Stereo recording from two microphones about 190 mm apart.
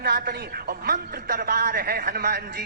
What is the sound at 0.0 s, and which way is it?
A woman's voice, 55° right (ahead or behind).